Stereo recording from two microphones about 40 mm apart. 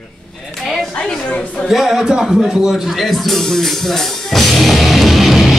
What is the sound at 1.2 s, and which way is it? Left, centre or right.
Speech, left.